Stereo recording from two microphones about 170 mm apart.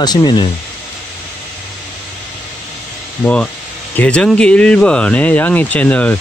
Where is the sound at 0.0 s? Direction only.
25° left (ahead or behind).